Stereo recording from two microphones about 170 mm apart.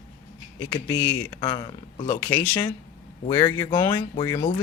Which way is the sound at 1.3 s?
25° left (ahead or behind).